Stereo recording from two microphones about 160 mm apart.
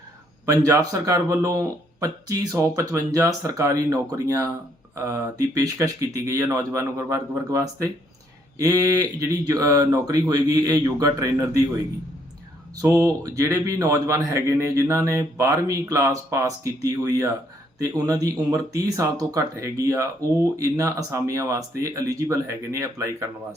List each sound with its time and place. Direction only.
0.4 s speech: 20° right (ahead or behind)
12.8 s speech: 20° right (ahead or behind)